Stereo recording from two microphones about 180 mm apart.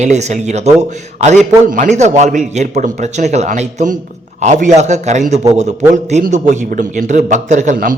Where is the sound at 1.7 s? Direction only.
45° right (ahead or behind).